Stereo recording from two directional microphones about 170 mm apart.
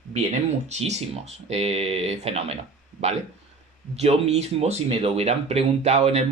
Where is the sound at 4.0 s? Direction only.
40° right (ahead or behind).